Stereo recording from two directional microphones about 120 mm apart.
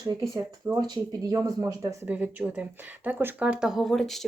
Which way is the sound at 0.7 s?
30° right (ahead or behind).